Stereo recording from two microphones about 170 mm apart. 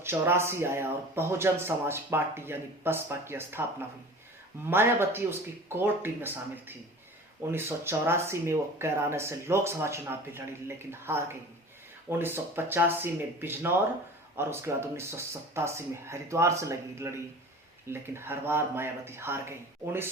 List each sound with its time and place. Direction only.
0.0 s speech: 15° right (ahead or behind)